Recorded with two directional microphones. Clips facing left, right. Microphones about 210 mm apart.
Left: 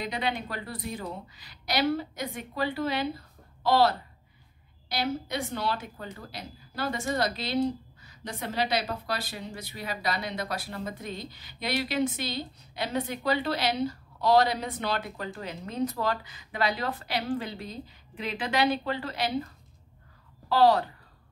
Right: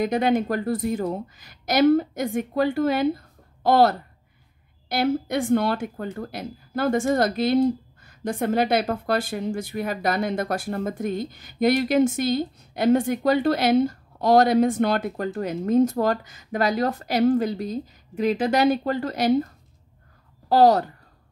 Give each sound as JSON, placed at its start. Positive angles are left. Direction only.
{"t": 0.0, "sound": "speech", "side_deg": -45}